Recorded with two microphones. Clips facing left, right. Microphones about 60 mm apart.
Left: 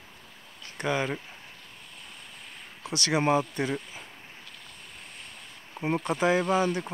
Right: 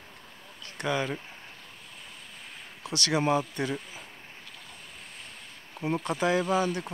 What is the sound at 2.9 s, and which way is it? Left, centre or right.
Speech, left.